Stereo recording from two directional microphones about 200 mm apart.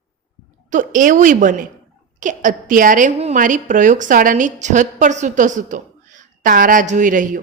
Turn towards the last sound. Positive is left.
turn(degrees=-40)  # may be behind; listen again after turning